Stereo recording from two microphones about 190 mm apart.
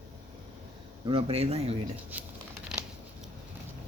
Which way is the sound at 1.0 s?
30° right (ahead or behind).